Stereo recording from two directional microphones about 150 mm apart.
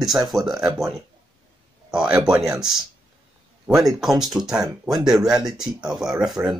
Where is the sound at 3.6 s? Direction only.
5° right (ahead or behind).